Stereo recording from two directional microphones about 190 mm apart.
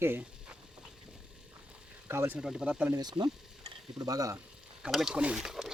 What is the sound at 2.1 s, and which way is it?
Speech, 10° right (ahead or behind).